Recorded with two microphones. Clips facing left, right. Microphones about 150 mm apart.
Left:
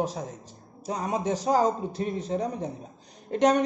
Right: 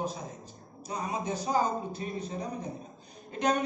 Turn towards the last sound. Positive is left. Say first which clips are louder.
# left 7 dB
turn(degrees=80)